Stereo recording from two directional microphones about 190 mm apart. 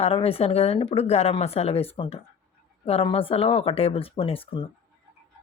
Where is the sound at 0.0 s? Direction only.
30° left (ahead or behind).